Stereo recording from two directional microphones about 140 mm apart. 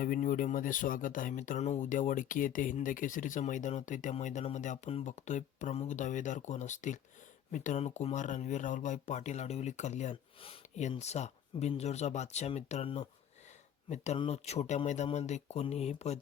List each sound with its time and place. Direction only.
0.0 s speech: 75° left (ahead or behind); by 16.2 s 50° left (ahead or behind)